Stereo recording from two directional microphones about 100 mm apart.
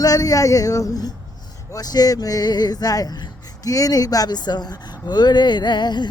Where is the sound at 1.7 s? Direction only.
40° left (ahead or behind).